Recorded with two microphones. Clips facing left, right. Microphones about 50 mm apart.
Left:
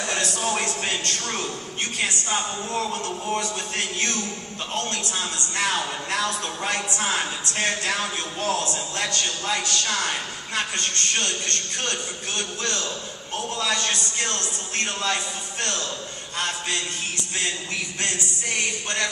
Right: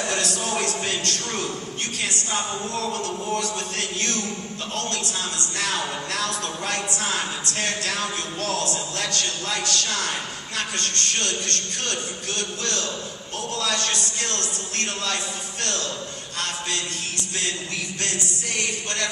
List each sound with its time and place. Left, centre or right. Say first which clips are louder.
0.3 s a man's voice: even; centre